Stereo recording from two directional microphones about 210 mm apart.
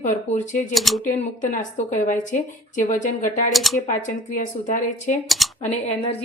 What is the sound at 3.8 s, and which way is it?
A woman's voice, 40° left (ahead or behind).